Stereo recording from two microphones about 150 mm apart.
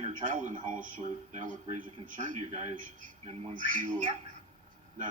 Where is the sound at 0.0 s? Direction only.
55° right (ahead or behind).